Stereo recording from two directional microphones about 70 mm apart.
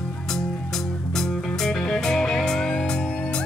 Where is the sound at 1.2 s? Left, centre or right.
Centre.